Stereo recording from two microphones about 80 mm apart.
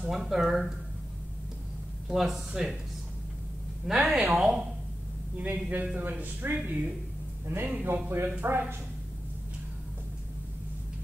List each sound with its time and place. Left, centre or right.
0.1 s speech: centre
2.0 s speech: centre
3.8 s a man's voice: centre; by 8.7 s right